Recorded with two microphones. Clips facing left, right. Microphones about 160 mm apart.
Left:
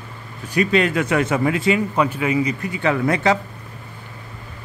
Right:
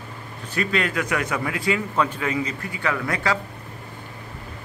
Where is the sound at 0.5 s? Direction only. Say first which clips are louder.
Left 6 dB; 20° left (ahead or behind).